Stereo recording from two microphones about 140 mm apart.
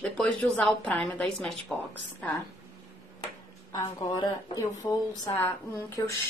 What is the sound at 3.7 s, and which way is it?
A woman's voice, 25° left (ahead or behind).